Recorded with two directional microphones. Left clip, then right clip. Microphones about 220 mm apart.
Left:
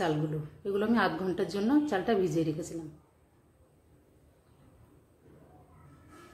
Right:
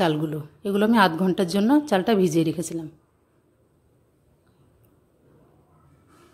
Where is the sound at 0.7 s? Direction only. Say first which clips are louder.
Right 9 dB; 45° right (ahead or behind).